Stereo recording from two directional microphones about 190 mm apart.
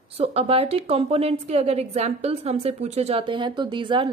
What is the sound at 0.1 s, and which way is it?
A woman's voice, 30° right (ahead or behind).